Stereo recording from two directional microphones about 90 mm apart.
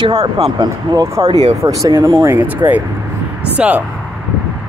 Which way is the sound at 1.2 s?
50° right (ahead or behind).